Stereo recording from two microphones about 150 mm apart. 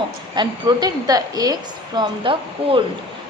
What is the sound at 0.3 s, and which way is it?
A woman's voice, 25° right (ahead or behind).